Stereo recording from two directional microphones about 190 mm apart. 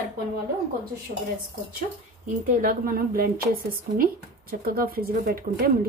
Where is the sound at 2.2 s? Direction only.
50° right (ahead or behind).